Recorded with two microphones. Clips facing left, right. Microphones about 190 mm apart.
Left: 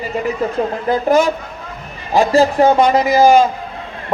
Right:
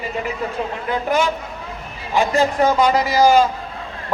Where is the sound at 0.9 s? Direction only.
40° left (ahead or behind); by 3.4 s 20° left (ahead or behind).